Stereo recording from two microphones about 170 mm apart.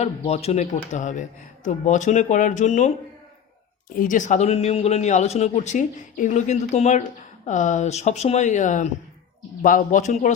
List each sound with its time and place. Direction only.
0.0 s speech: 35° left (ahead or behind)
3.9 s speech: 50° left (ahead or behind)